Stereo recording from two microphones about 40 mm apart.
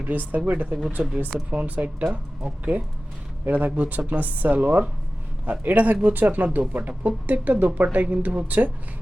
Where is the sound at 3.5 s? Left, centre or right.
Right.